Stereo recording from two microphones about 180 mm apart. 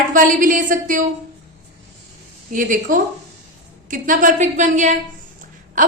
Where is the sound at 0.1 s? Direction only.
45° right (ahead or behind).